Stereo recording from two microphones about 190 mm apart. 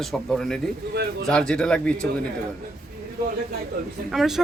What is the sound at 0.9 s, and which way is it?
Speech, 60° right (ahead or behind).